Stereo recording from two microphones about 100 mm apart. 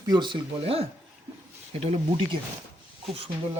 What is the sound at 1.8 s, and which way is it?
Speech, 70° right (ahead or behind).